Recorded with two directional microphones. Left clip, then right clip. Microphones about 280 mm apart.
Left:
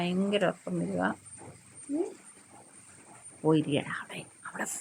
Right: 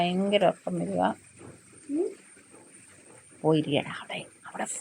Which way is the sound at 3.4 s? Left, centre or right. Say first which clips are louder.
Right 2 dB; centre.